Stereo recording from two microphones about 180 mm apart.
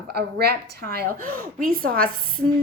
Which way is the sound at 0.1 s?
60° right (ahead or behind).